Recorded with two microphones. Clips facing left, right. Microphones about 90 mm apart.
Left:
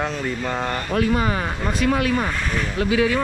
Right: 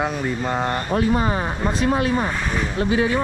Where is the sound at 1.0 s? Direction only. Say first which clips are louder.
Left 1 dB; 25° right (ahead or behind).